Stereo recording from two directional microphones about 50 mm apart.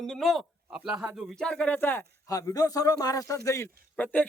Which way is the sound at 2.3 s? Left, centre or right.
Left.